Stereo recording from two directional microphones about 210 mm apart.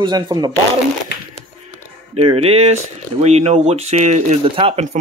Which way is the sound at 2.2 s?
30° right (ahead or behind).